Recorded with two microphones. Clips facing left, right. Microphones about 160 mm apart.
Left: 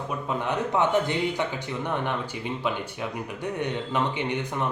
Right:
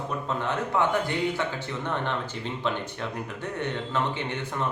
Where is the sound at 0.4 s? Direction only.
15° left (ahead or behind).